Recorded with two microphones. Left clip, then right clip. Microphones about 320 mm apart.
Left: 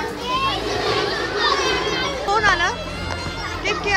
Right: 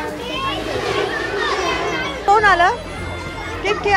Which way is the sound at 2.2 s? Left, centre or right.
Centre.